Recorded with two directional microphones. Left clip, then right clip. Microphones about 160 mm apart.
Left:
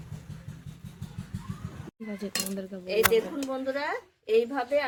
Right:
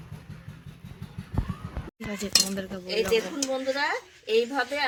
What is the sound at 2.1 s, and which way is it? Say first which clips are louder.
Speech: right 3 dB; centre (ahead or behind).